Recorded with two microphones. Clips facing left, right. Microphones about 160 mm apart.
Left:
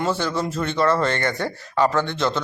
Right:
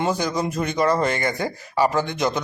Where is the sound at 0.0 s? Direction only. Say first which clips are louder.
Even; 15° right (ahead or behind).